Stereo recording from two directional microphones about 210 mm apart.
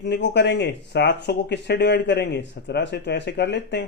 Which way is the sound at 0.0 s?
55° left (ahead or behind).